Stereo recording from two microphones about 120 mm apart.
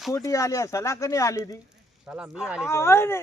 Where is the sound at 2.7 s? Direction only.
20° left (ahead or behind).